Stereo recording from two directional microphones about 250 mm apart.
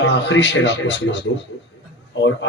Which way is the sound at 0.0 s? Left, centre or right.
Left.